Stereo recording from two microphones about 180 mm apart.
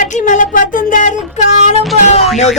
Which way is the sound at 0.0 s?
45° left (ahead or behind).